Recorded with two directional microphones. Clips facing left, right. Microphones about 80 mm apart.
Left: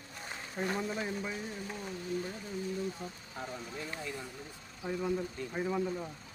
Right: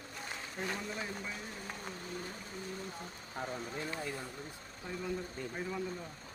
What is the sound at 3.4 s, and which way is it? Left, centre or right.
Speech, right.